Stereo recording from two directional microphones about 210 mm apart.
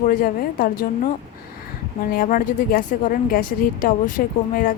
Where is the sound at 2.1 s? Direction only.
45° left (ahead or behind).